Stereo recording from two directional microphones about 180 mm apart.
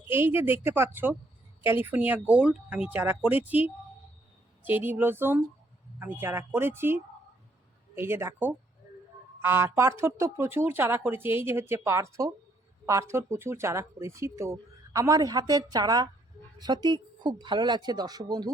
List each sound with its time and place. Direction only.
0.0 s speech: 10° right (ahead or behind)